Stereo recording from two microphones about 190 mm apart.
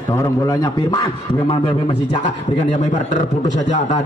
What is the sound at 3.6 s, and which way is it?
Speech, 40° left (ahead or behind).